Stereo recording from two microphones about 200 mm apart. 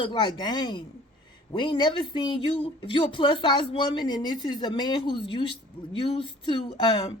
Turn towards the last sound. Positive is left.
turn(degrees=20)  # may be behind; listen again after turning